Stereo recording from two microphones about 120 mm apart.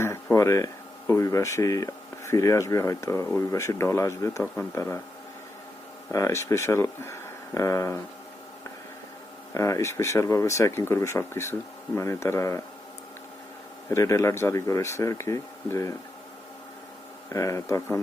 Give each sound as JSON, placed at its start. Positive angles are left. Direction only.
{"t": 0.0, "sound": "speech", "side_deg": 25}
{"t": 6.1, "sound": "speech", "side_deg": 25}
{"t": 9.6, "sound": "speech", "side_deg": 25}
{"t": 13.9, "sound": "speech", "side_deg": 25}
{"t": 17.3, "sound": "speech", "side_deg": 25}